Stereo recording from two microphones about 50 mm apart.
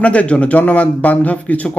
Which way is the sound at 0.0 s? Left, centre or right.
Left.